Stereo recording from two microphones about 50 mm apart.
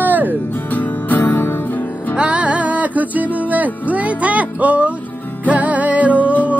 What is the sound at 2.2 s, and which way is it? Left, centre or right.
Music, right.